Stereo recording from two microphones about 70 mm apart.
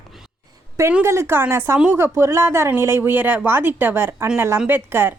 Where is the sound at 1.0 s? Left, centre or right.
Right.